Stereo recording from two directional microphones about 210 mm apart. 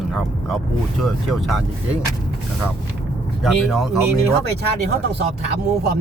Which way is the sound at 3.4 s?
Centre (ahead or behind).